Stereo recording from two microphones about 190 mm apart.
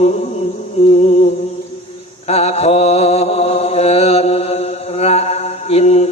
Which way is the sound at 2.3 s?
35° left (ahead or behind).